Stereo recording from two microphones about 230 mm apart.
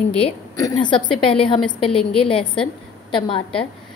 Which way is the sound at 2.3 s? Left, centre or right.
Left.